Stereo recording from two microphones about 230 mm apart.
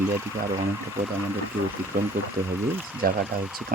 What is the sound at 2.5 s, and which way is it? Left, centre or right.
Speech, centre.